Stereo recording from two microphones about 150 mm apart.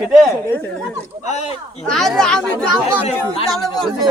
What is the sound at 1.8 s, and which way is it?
Speech, centre (ahead or behind).